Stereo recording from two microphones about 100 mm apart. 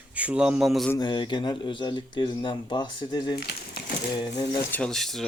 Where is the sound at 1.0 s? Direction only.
50° left (ahead or behind).